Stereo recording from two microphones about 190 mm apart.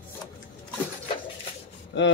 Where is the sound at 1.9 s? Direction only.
70° left (ahead or behind).